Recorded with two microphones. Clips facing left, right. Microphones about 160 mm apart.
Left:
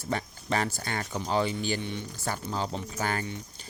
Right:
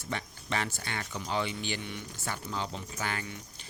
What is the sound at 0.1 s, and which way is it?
Speech, 40° left (ahead or behind).